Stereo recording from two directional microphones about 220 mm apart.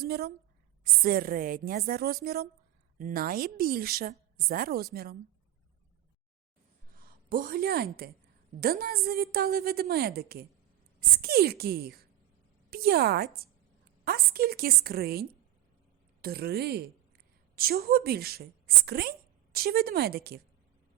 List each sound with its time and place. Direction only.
0.0 s a woman's voice: 45° right (ahead or behind)
7.0 s a woman's voice: 40° right (ahead or behind)